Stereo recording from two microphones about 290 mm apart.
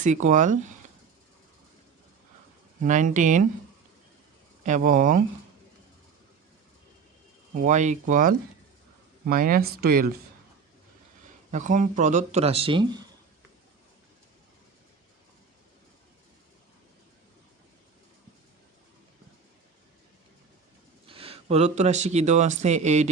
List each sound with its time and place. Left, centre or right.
0.0 s speech: right
2.8 s speech: right
4.6 s speech: right
7.6 s speech: right
11.5 s speech: right
21.1 s speech: centre